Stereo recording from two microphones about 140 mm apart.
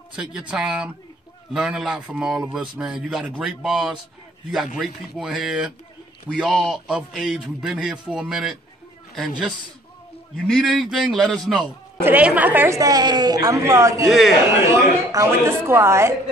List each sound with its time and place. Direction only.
0.1 s a man's voice: 5° right (ahead or behind)
12.0 s a woman's voice: 10° right (ahead or behind)